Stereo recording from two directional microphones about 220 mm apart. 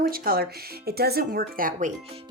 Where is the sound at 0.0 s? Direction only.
45° right (ahead or behind).